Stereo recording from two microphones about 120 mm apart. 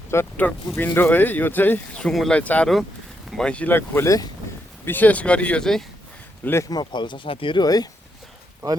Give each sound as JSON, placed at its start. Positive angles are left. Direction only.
{"t": 0.1, "sound": "speech", "side_deg": 15}
{"t": 2.0, "sound": "speech", "side_deg": 5}
{"t": 4.9, "sound": "speech", "side_deg": 15}
{"t": 6.4, "sound": "speech", "side_deg": 20}
{"t": 6.7, "sound": "speech", "side_deg": 35}
{"t": 7.6, "sound": "speech", "side_deg": 35}